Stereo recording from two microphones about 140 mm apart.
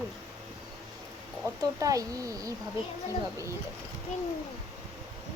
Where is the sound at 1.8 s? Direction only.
25° right (ahead or behind).